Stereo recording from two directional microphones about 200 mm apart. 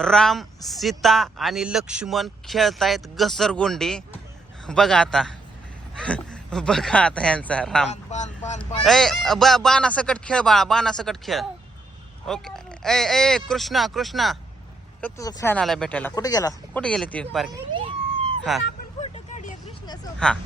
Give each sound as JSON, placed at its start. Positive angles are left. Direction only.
{"t": 0.0, "sound": "speech", "side_deg": 5}
{"t": 7.9, "sound": "speech", "side_deg": 35}
{"t": 8.8, "sound": "speech", "side_deg": 0}
{"t": 15.0, "sound": "speech", "side_deg": 15}
{"t": 15.5, "sound": "speech", "side_deg": 0}
{"t": 16.1, "sound": "speech", "side_deg": 20}
{"t": 16.8, "sound": "speech", "side_deg": 5}
{"t": 17.5, "sound": "a sound", "side_deg": -25}
{"t": 18.5, "sound": "speech", "side_deg": 0}
{"t": 18.9, "sound": "vehicle", "side_deg": 35}
{"t": 20.1, "sound": "speech", "side_deg": 5}